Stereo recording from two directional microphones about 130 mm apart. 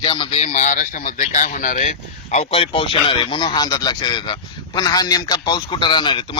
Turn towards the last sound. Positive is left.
turn(degrees=40)  # may be behind; listen again after turning